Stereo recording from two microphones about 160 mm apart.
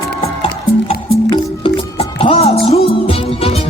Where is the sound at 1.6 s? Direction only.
35° left (ahead or behind).